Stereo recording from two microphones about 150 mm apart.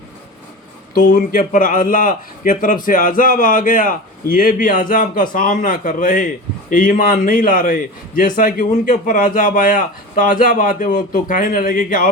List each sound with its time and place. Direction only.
1.1 s a man's voice: 65° left (ahead or behind)